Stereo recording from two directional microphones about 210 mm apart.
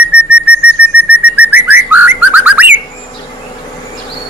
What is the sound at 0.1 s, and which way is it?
Whistling, 5° right (ahead or behind).